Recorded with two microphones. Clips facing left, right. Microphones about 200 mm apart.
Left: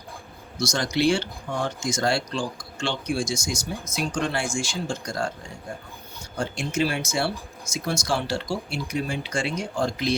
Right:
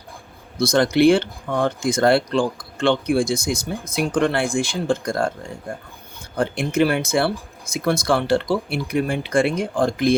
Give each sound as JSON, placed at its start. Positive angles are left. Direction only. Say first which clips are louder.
{"t": 0.6, "sound": "speech", "louder": "right 8 dB", "side_deg": -55}